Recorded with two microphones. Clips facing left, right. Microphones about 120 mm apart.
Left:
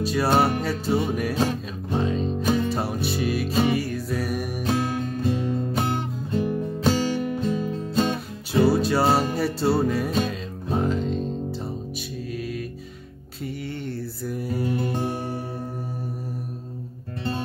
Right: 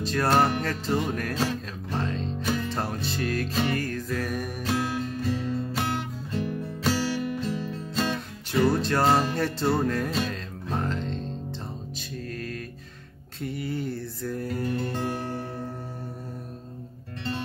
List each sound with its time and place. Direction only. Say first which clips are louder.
0.0 s music: left 2 dB; 10° left (ahead or behind)
2.4 s music: left 6 dB; 20° left (ahead or behind)
2.7 s music: left 4 dB; 10° left (ahead or behind)
4.6 s music: left 3 dB; 20° left (ahead or behind)
12.4 s music: left 7 dB; 5° left (ahead or behind)
13.4 s a sound: right 1 dB; centre (ahead or behind)
14.2 s music: left 2 dB; 10° left (ahead or behind)